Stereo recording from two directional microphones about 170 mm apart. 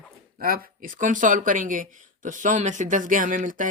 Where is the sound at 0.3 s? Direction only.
60° right (ahead or behind).